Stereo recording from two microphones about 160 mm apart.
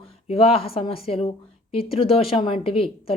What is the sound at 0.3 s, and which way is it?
Speech, 35° left (ahead or behind).